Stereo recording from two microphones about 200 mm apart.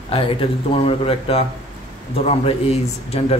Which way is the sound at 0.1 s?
25° left (ahead or behind).